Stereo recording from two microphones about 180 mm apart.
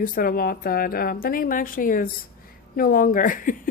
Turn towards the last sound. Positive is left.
turn(degrees=50)  # may be behind; listen again after turning